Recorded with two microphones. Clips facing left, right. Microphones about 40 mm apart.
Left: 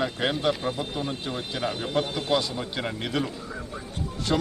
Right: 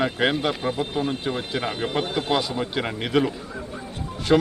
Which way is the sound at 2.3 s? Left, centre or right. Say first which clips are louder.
Right 2 dB; centre.